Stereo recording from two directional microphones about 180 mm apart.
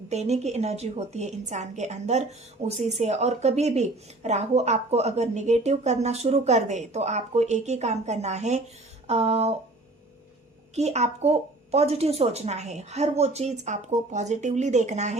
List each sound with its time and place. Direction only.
0.1 s a woman's voice: 40° right (ahead or behind)
10.8 s a woman's voice: 40° right (ahead or behind)